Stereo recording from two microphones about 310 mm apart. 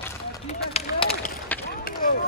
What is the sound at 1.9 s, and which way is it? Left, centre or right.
Run, left.